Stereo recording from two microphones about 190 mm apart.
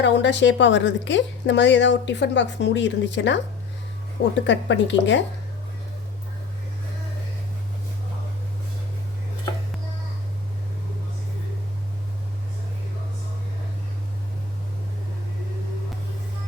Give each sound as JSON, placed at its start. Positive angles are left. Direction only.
{"t": 0.0, "sound": "a woman's voice", "side_deg": 70}
{"t": 4.4, "sound": "a woman's voice", "side_deg": 70}